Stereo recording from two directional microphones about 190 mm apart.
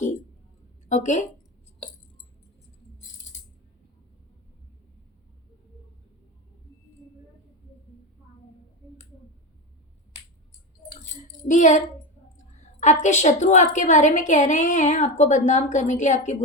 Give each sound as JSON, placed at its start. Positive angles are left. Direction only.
{"t": 0.9, "sound": "a woman's voice", "side_deg": 40}
{"t": 11.1, "sound": "child singing", "side_deg": 40}
{"t": 12.8, "sound": "a woman's voice", "side_deg": 40}